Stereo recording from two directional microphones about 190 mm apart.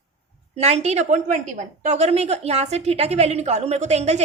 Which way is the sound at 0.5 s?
35° right (ahead or behind).